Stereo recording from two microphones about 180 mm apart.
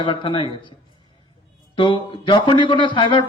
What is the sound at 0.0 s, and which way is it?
Speech, 30° left (ahead or behind).